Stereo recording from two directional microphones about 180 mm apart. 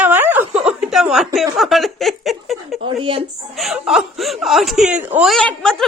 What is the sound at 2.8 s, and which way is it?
Speech, 30° right (ahead or behind).